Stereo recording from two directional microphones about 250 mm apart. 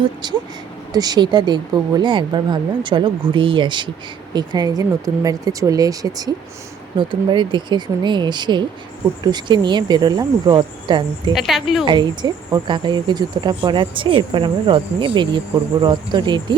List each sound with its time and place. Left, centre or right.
0.0 s speech: centre
11.3 s a woman's voice: centre
11.9 s speech: centre